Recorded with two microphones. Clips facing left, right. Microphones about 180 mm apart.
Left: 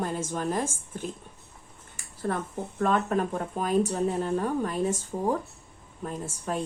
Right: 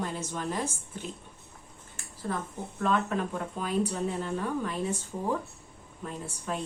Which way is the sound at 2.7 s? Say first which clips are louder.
Left 3 dB; 45° left (ahead or behind).